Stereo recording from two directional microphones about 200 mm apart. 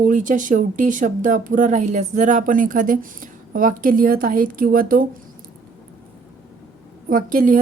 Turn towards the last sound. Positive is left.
turn(degrees=-40)  # may be behind; listen again after turning